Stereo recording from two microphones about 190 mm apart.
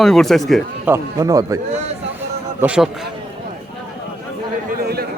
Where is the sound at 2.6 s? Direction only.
5° right (ahead or behind).